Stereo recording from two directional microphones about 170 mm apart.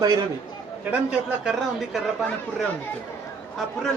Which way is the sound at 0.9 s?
5° right (ahead or behind).